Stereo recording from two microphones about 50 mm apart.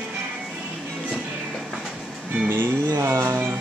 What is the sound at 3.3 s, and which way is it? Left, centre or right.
Music, right.